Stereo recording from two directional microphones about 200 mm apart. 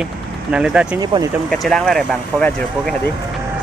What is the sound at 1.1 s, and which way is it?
Speech, 25° right (ahead or behind).